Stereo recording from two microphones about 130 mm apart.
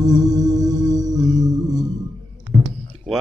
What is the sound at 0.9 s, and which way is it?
Music, 30° right (ahead or behind).